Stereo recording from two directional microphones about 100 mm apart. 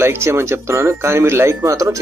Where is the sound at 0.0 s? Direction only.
25° right (ahead or behind).